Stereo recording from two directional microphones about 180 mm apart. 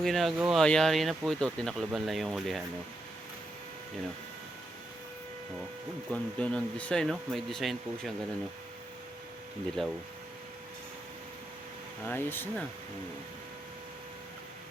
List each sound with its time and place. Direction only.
0.0 s speech: centre (ahead or behind)
6.1 s speech: 5° left (ahead or behind)
9.8 s speech: centre (ahead or behind)
12.0 s speech: 10° left (ahead or behind)